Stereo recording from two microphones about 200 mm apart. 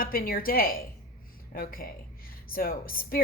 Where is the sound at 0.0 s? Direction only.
45° left (ahead or behind).